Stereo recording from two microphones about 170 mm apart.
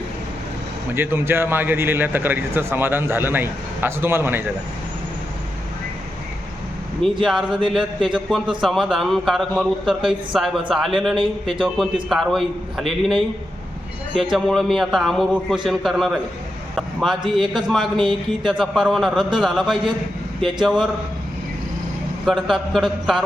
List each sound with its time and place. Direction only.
0.9 s speech: 15° right (ahead or behind)
7.3 s a man's voice: centre (ahead or behind)
11.2 s a man's voice: 30° right (ahead or behind)
12.0 s a man's voice: centre (ahead or behind)
17.9 s speech: 30° right (ahead or behind)
18.4 s a man's voice: centre (ahead or behind)
22.3 s a man's voice: centre (ahead or behind)